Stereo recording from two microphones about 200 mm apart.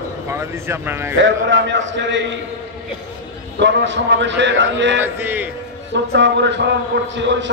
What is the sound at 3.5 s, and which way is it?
A man's voice, 65° right (ahead or behind).